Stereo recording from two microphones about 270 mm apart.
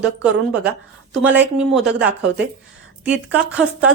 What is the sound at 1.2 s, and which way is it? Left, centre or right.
Speech, centre.